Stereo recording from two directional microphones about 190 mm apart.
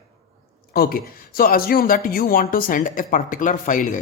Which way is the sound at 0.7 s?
50° left (ahead or behind).